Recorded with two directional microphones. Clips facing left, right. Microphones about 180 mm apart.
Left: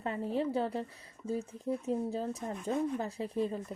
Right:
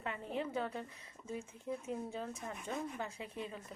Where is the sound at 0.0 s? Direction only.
35° left (ahead or behind).